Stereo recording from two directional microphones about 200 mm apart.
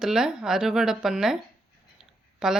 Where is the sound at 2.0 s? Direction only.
Centre (ahead or behind).